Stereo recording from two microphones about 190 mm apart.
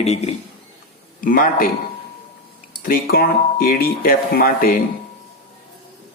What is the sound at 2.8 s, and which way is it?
Speech, 50° left (ahead or behind).